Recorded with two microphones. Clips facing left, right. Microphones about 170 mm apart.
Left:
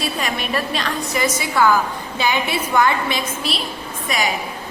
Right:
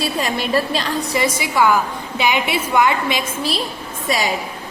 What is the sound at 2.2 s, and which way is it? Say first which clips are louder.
Speech: right 2 dB; 20° right (ahead or behind).